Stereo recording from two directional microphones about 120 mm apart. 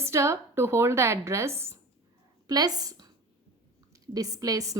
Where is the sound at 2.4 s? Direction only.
35° right (ahead or behind).